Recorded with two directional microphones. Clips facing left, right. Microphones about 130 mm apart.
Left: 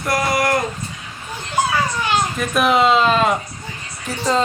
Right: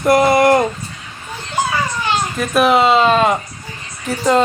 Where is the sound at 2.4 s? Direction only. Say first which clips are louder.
Right 4 dB; centre (ahead or behind).